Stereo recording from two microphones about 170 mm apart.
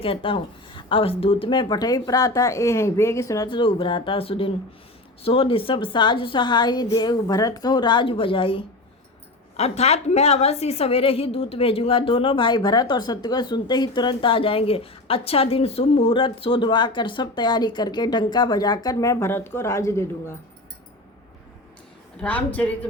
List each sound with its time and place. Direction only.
0.0 s a woman's voice: 30° left (ahead or behind); by 20.3 s 15° left (ahead or behind)
22.2 s a woman's voice: 10° left (ahead or behind)